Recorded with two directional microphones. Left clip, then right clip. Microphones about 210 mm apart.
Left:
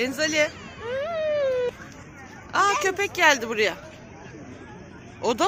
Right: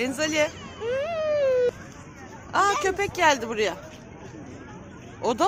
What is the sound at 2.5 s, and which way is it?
A man's voice, centre (ahead or behind).